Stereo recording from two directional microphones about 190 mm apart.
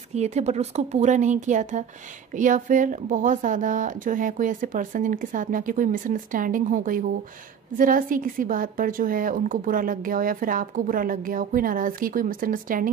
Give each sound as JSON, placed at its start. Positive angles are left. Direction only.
{"t": 0.1, "sound": "a woman's voice", "side_deg": -35}